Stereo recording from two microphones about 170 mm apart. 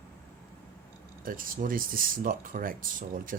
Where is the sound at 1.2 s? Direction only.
55° right (ahead or behind).